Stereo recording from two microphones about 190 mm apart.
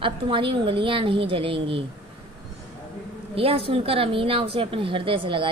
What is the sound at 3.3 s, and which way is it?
A woman's voice, 30° right (ahead or behind).